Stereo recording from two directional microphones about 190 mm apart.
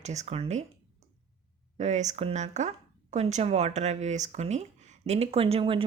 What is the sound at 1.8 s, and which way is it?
Speech, 35° right (ahead or behind).